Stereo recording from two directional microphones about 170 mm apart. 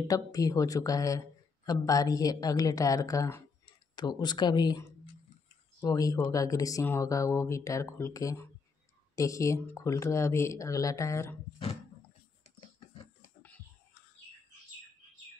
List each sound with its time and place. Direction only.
0.1 s speech: 20° left (ahead or behind)